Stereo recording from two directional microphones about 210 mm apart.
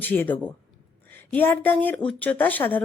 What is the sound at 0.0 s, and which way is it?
Speech, 10° left (ahead or behind).